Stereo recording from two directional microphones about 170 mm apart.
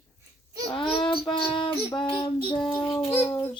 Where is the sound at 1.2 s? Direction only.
30° left (ahead or behind).